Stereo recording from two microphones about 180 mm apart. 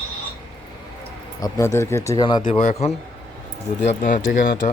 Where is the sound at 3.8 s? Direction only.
50° left (ahead or behind).